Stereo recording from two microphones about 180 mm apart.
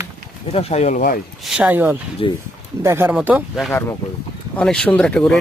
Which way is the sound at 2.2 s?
30° left (ahead or behind).